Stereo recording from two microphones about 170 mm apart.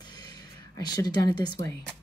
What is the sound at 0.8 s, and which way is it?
Speech, 25° left (ahead or behind).